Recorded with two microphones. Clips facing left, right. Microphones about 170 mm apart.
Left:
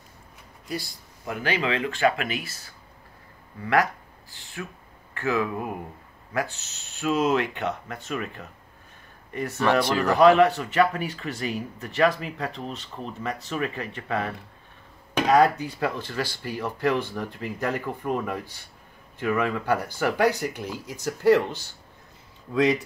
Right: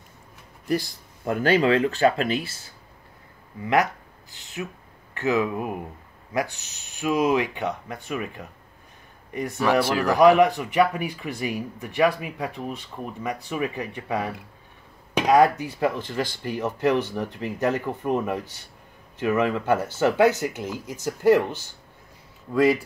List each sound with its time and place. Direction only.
1.2 s speech: 45° right (ahead or behind); by 21.5 s 15° right (ahead or behind)
22.5 s speech: 5° right (ahead or behind)